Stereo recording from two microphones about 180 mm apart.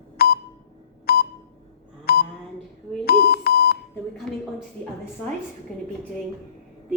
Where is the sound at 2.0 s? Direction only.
60° left (ahead or behind).